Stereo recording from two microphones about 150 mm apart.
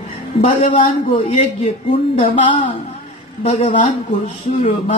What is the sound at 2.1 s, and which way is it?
Speech, 50° left (ahead or behind).